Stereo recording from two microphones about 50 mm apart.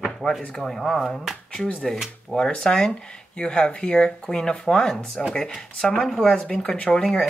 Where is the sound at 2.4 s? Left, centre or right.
Centre.